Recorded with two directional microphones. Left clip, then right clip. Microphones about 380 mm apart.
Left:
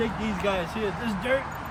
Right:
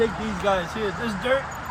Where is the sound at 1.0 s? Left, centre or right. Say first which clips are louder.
Right 3 dB; centre.